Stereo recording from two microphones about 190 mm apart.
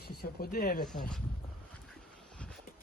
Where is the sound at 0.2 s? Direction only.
55° left (ahead or behind).